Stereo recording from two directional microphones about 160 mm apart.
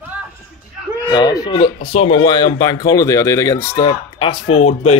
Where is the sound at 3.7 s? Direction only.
30° left (ahead or behind).